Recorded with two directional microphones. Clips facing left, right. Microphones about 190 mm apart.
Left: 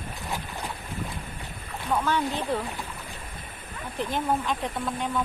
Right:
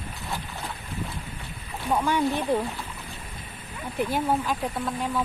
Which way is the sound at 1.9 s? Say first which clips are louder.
Right 2 dB; 15° right (ahead or behind).